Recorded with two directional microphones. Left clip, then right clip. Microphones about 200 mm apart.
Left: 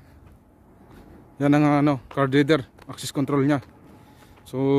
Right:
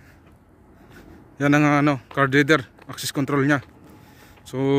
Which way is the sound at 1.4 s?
10° left (ahead or behind).